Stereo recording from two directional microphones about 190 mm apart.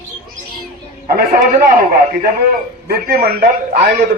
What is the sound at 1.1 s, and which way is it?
A man's voice, 50° right (ahead or behind).